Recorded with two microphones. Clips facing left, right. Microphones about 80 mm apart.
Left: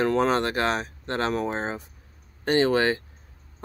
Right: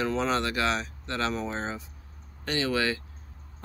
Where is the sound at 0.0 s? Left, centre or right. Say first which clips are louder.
Left 5 dB; left.